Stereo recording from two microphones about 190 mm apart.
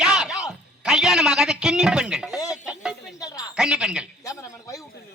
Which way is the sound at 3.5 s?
5° right (ahead or behind).